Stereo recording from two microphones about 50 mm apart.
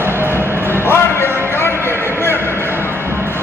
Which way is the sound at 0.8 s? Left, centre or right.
Left.